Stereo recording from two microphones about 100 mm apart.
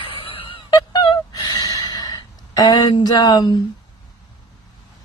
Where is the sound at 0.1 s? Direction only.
65° left (ahead or behind); by 3.6 s 45° left (ahead or behind).